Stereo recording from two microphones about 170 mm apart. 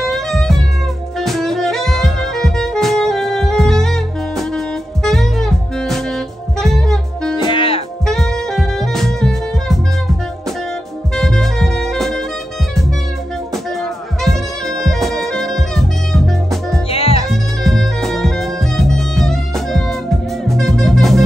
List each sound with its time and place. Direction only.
0.0 s music: centre (ahead or behind)
7.3 s music: 30° left (ahead or behind)
8.1 s saxophone: centre (ahead or behind)
11.1 s saxophone: centre (ahead or behind)
14.2 s music: centre (ahead or behind)
16.9 s music: 35° left (ahead or behind)
17.3 s music: centre (ahead or behind)